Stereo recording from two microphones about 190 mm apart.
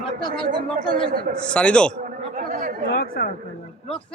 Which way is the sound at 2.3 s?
40° right (ahead or behind).